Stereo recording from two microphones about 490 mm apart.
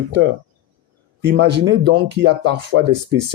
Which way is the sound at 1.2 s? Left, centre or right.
Right.